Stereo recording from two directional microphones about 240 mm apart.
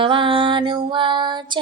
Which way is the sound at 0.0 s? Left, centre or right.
Right.